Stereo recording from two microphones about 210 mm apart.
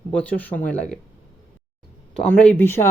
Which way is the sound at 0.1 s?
5° left (ahead or behind).